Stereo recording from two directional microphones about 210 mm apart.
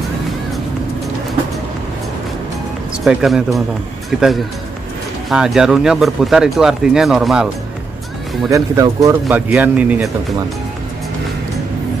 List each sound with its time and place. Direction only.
3.0 s speech: centre (ahead or behind)
5.3 s speech: 5° right (ahead or behind)
8.5 s speech: 15° right (ahead or behind)